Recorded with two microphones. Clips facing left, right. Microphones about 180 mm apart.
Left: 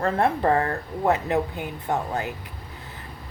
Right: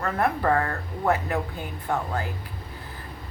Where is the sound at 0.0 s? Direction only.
25° left (ahead or behind).